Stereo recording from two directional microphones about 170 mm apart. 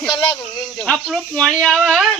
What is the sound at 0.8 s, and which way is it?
Speech, 5° left (ahead or behind).